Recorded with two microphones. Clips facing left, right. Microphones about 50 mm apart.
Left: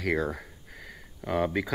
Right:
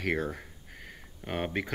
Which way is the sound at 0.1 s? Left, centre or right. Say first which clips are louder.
Left 5 dB; left.